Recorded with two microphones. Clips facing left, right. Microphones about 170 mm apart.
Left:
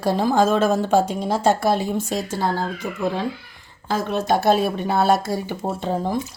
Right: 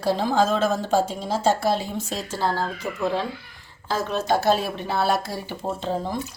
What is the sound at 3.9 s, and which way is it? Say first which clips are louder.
A woman's voice: left 2 dB; 55° left (ahead or behind).